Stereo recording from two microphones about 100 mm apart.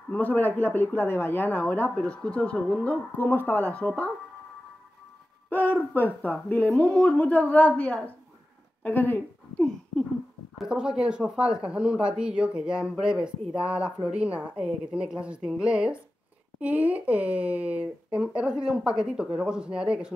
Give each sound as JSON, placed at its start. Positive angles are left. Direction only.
{"t": 0.1, "sound": "a woman's voice", "side_deg": 15}
{"t": 5.5, "sound": "a woman's voice", "side_deg": 20}
{"t": 9.6, "sound": "a sound", "side_deg": 10}
{"t": 10.6, "sound": "speech", "side_deg": -5}